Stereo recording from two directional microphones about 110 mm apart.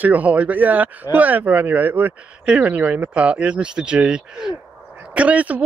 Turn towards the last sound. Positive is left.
turn(degrees=-15)  # may be behind; listen again after turning